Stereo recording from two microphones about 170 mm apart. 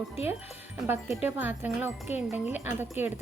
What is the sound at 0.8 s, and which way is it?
Jingle bell, 10° right (ahead or behind).